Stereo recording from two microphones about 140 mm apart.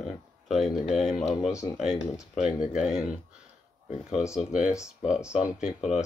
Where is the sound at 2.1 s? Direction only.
5° right (ahead or behind).